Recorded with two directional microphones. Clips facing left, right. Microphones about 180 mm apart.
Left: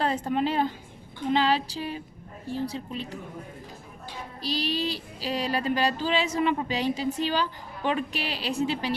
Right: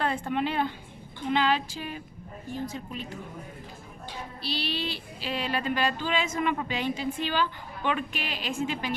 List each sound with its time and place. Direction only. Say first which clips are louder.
0.0 s speech: left 2 dB; 35° left (ahead or behind)
4.4 s speech: left 4 dB; 40° left (ahead or behind)